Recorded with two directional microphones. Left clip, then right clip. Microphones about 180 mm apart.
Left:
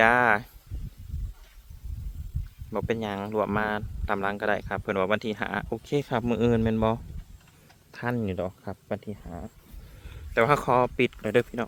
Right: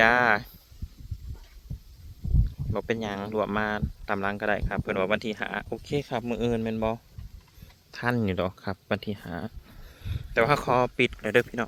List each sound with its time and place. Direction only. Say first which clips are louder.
0.0 s speech: even; 5° left (ahead or behind)
2.7 s speech: left 1 dB; 5° left (ahead or behind)
8.1 s speech: right 2 dB; 20° right (ahead or behind)
10.1 s speech: left 1 dB; 10° left (ahead or behind)